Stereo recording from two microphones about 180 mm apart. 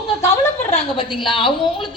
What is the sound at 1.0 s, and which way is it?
Speech, 25° left (ahead or behind).